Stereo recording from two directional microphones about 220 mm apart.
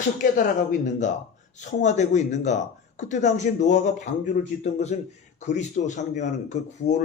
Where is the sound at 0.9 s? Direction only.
35° left (ahead or behind).